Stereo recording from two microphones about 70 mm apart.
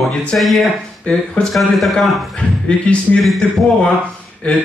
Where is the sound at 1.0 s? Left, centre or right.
Centre.